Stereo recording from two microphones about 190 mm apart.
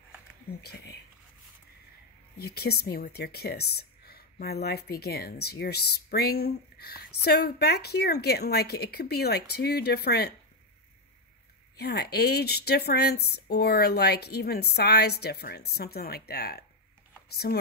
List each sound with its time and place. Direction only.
0.6 s speech: 55° left (ahead or behind)
2.3 s speech: 55° left (ahead or behind)
11.7 s speech: 55° left (ahead or behind)